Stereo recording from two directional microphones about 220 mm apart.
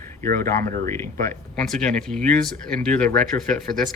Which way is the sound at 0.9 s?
10° left (ahead or behind).